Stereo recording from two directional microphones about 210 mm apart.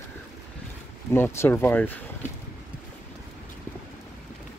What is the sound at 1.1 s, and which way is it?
Speech, 10° left (ahead or behind).